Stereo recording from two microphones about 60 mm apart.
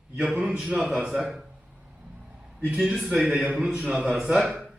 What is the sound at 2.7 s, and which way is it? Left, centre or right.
A man's voice, centre.